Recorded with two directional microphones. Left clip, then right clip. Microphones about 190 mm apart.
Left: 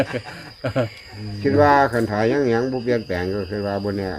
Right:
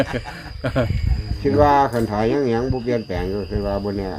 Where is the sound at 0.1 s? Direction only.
10° right (ahead or behind).